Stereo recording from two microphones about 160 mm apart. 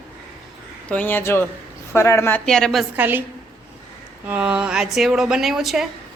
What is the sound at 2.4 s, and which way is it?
Speech, 5° left (ahead or behind).